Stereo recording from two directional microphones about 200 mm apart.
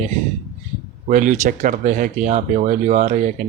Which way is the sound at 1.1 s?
40° right (ahead or behind).